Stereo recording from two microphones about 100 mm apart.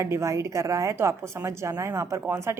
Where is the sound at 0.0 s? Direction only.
30° right (ahead or behind).